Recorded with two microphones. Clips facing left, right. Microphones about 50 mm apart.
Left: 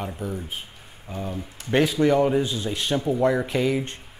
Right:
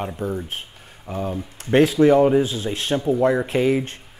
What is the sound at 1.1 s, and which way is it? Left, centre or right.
Speech, right.